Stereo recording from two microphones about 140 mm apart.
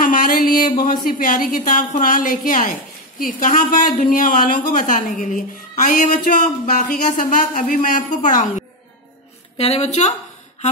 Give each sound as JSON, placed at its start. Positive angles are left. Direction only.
{"t": 0.0, "sound": "music", "side_deg": 80}
{"t": 1.0, "sound": "a woman's voice", "side_deg": 75}
{"t": 9.6, "sound": "a woman's voice", "side_deg": 50}